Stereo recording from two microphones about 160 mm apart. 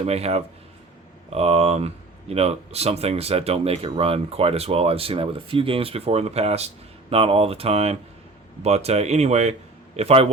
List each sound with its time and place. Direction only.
0.0 s speech: 40° right (ahead or behind)